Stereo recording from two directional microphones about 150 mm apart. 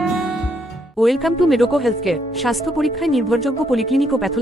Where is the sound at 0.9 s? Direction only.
Centre (ahead or behind).